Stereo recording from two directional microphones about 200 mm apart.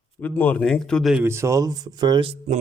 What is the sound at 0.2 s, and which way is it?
Speech, 10° left (ahead or behind).